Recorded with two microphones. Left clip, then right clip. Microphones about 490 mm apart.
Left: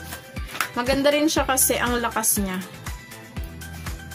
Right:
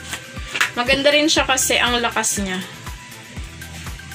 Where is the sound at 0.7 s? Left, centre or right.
Left.